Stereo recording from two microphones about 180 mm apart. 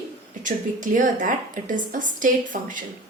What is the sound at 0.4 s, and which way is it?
A woman's voice, 45° right (ahead or behind).